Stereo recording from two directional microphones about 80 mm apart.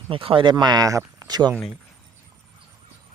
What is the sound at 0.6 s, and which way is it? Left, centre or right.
Speech, right.